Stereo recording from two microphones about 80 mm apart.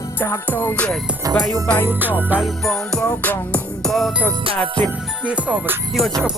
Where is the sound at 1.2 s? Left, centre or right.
Right.